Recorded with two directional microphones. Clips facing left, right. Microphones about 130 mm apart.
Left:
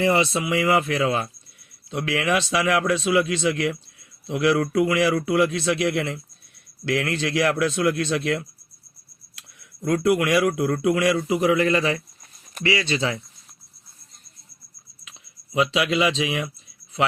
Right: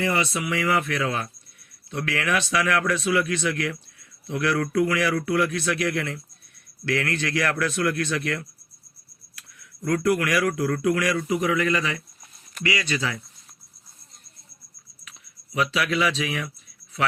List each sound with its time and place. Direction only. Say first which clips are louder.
0.0 s speech: left 4 dB; 25° left (ahead or behind)
16.1 s speech: left 3 dB; 25° left (ahead or behind)